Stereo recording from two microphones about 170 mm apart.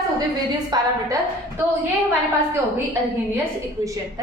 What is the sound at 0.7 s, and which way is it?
Speech, 25° right (ahead or behind).